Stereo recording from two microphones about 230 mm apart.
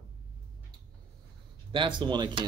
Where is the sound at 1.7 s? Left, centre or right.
Right.